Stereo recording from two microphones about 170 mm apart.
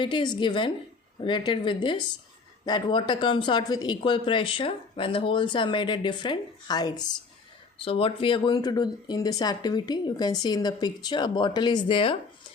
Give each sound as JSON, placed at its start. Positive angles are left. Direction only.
{"t": 0.0, "sound": "speech", "side_deg": 30}
{"t": 7.8, "sound": "speech", "side_deg": 35}